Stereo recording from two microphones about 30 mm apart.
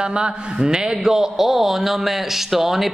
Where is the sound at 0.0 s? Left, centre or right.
Right.